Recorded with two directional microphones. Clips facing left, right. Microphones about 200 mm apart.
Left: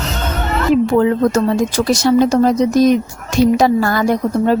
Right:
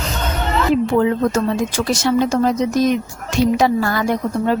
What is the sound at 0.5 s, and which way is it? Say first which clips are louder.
A woman's voice: left 3 dB; 45° left (ahead or behind).